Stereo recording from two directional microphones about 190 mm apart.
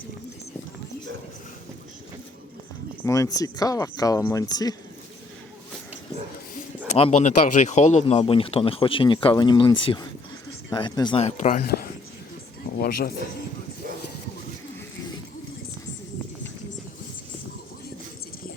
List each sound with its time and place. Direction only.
3.0 s speech: 20° left (ahead or behind)
6.9 s speech: 35° left (ahead or behind); by 13.1 s 55° left (ahead or behind)